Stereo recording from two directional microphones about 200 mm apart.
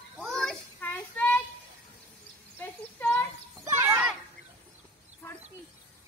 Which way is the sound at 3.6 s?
10° right (ahead or behind).